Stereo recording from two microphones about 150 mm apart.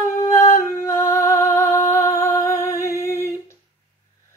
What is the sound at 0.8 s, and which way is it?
Music, 20° left (ahead or behind).